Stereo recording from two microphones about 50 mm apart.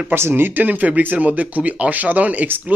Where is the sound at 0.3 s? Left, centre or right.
Right.